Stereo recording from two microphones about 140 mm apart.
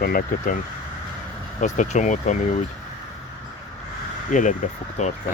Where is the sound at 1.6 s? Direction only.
60° left (ahead or behind).